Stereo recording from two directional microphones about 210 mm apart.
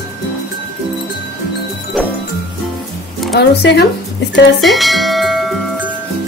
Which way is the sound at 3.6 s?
55° left (ahead or behind).